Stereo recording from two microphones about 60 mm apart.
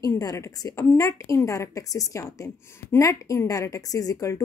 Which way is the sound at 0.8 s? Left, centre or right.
Left.